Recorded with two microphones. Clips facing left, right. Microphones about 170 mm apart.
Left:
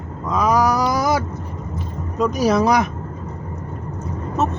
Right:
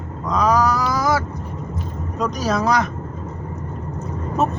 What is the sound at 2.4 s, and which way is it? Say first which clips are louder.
Speech: left 3 dB; 10° left (ahead or behind).